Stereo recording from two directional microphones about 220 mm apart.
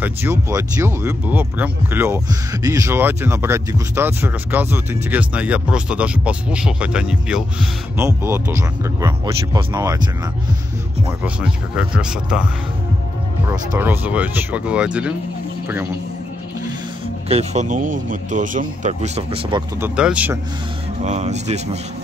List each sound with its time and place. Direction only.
0.0 s speech: 10° right (ahead or behind)
11.2 s speech: 5° right (ahead or behind)
13.5 s speech: 10° right (ahead or behind)
17.3 s speech: 30° right (ahead or behind)
19.8 s speech: 5° right (ahead or behind)
21.0 s speech: 30° right (ahead or behind)